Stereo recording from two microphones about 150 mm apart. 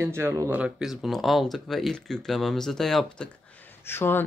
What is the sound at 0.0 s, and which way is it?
Speech, 15° right (ahead or behind).